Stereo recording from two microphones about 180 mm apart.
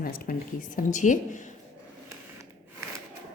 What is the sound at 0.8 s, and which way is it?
Speech, 45° left (ahead or behind).